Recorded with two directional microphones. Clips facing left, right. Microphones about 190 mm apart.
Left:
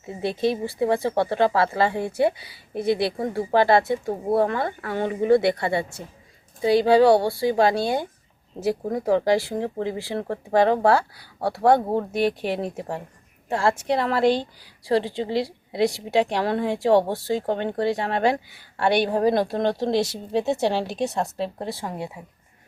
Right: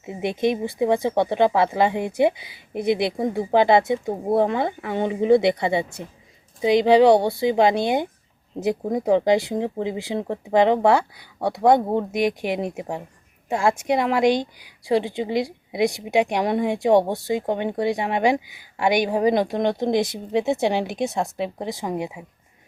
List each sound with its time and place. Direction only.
0.0 s a woman's voice: 20° right (ahead or behind)